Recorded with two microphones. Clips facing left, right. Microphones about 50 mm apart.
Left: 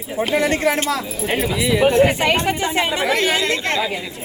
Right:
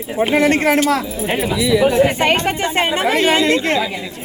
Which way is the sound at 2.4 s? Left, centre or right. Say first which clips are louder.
Right 2 dB; right.